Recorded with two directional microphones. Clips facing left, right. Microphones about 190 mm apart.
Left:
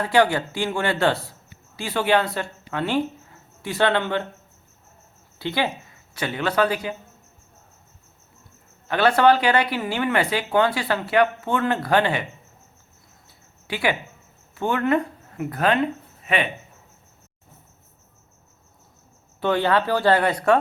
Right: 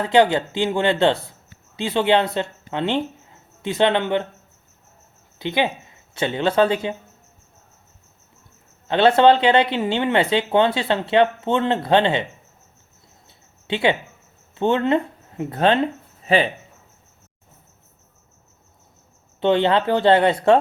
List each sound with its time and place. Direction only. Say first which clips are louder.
0.0 s speech: right 3 dB; 20° right (ahead or behind)
5.4 s speech: right 3 dB; 20° right (ahead or behind)
8.9 s speech: right 3 dB; 25° right (ahead or behind)
13.2 s cricket: right 4 dB; 25° right (ahead or behind)
14.5 s speech: right 3 dB; 25° right (ahead or behind)
19.4 s speech: right 3 dB; 25° right (ahead or behind)